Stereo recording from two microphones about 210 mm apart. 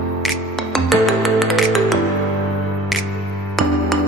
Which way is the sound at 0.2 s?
Centre (ahead or behind).